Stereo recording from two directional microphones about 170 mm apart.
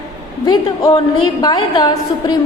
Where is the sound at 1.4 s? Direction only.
25° left (ahead or behind).